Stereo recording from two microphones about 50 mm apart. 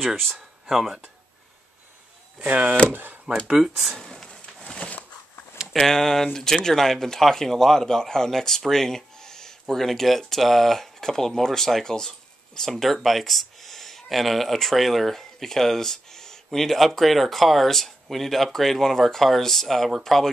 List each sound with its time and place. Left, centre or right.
0.0 s speech: centre
2.3 s speech: right
3.4 s speech: centre
3.9 s a sound: centre
4.6 s a sound: left
5.7 s speech: centre